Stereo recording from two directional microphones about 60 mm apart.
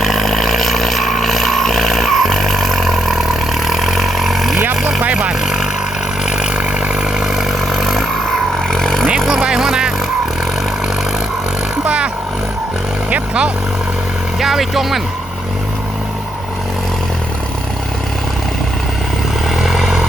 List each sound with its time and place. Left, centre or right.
0.0 s a sound: centre
4.7 s vehicle: centre
6.3 s vehicle: centre
7.3 s vehicle: centre
9.3 s music: centre
13.1 s vehicle: right
14.3 s speech: centre
19.5 s vehicle: centre